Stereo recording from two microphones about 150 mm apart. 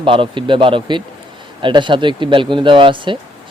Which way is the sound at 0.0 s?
35° right (ahead or behind).